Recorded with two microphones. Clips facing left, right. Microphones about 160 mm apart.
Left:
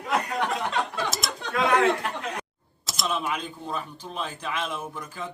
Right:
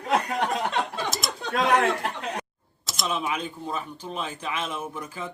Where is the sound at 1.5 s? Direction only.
70° right (ahead or behind).